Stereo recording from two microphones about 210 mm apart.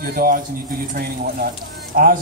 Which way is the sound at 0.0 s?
45° right (ahead or behind).